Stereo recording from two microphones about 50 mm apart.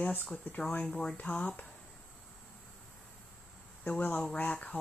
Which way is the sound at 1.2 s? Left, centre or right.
Left.